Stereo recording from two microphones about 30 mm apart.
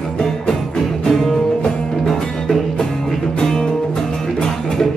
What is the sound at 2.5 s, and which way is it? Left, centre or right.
Music, centre.